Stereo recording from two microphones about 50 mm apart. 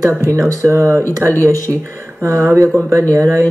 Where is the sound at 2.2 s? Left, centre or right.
Right.